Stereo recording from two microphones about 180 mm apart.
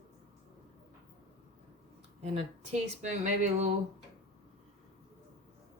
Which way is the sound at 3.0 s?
40° right (ahead or behind).